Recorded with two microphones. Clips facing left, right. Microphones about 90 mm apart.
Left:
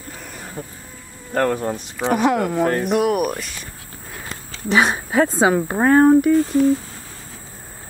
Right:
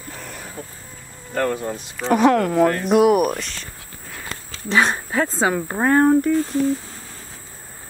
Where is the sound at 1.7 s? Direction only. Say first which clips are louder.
Left 1 dB; 15° left (ahead or behind).